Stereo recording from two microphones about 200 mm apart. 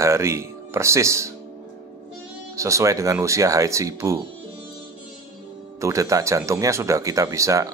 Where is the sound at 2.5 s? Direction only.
15° right (ahead or behind).